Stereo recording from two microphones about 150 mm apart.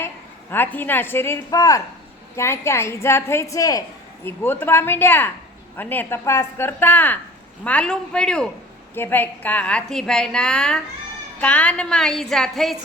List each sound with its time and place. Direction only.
0.5 s a woman's voice: 15° left (ahead or behind)